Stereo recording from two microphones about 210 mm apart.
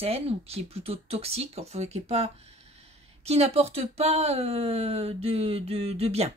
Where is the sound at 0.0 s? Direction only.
30° right (ahead or behind).